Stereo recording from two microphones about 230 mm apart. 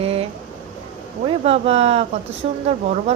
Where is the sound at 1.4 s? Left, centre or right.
Right.